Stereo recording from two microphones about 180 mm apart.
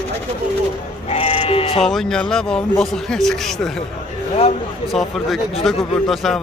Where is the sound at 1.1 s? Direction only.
35° left (ahead or behind).